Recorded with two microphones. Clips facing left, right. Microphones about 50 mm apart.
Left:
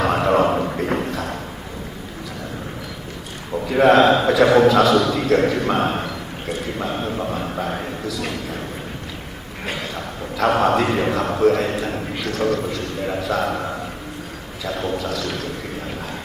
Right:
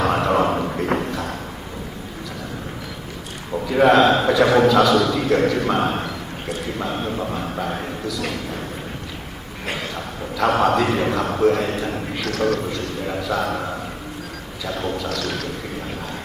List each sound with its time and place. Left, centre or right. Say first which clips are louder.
0.0 s a sound: left 1 dB; centre
3.8 s a man's voice: left 1 dB; centre
10.3 s a man's voice: even; centre